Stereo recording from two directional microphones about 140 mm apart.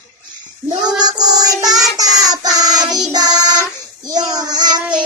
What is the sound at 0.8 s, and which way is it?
Child singing, 30° right (ahead or behind).